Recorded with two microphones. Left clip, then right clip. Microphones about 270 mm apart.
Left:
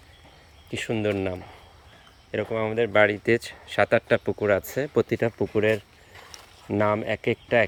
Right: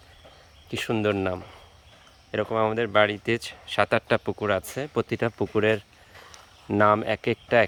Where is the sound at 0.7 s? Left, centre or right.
Centre.